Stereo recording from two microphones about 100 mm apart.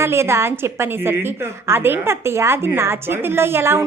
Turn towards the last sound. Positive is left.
turn(degrees=-25)  # may be behind; listen again after turning